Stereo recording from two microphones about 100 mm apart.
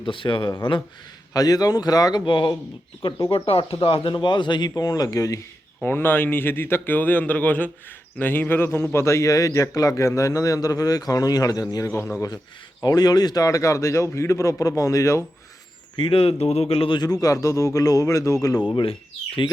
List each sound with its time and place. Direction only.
0.0 s speech: 60° left (ahead or behind)
1.3 s a man's voice: 40° left (ahead or behind)
2.2 s speech: 55° left (ahead or behind)
3.2 s speech: 75° left (ahead or behind); by 5.4 s 35° left (ahead or behind)
5.8 s a man's voice: 20° left (ahead or behind)
16.0 s speech: 65° left (ahead or behind)
17.0 s a man's voice: 40° left (ahead or behind)